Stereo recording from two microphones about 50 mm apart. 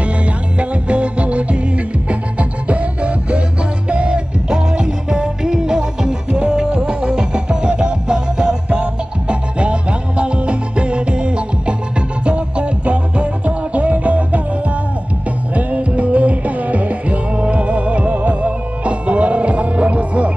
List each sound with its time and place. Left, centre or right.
0.0 s music: right
15.5 s music: right